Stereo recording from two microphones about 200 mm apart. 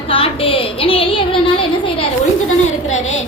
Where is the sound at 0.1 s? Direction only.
25° left (ahead or behind).